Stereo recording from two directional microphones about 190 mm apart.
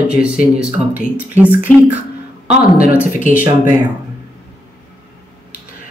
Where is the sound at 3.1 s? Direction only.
40° left (ahead or behind).